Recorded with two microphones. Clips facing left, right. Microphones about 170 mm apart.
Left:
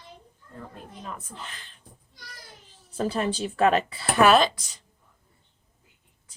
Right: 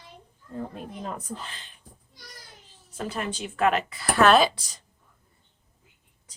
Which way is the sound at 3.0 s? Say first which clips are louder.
Left 5 dB; 35° left (ahead or behind).